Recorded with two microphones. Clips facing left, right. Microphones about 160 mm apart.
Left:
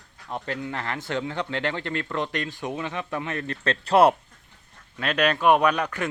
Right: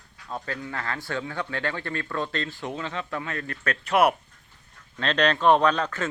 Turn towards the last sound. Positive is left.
turn(degrees=15)  # may be behind; listen again after turning